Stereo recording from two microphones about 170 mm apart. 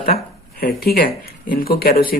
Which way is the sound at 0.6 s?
65° left (ahead or behind).